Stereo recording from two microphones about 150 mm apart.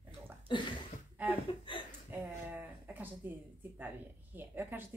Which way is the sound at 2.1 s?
10° right (ahead or behind).